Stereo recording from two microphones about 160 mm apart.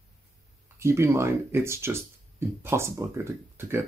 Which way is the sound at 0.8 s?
15° right (ahead or behind).